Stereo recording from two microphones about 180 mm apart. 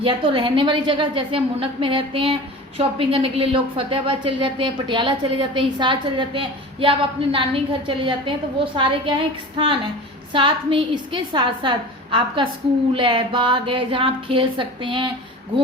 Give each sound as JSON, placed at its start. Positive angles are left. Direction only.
{"t": 0.0, "sound": "a woman's voice", "side_deg": -30}